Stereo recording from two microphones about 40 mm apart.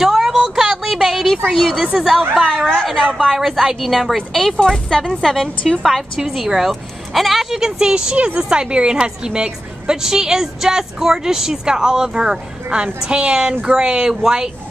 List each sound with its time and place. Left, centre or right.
0.0 s a sound: centre
1.9 s a woman's voice: centre
2.3 s a woman's voice: centre
3.3 s a woman's voice: centre
5.6 s a woman's voice: left
5.9 s a woman's voice: centre
12.6 s a woman's voice: right